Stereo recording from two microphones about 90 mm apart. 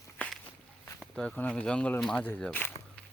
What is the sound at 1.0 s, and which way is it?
Speech, 10° left (ahead or behind).